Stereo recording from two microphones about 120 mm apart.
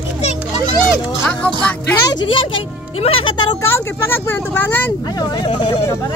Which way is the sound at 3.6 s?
20° left (ahead or behind).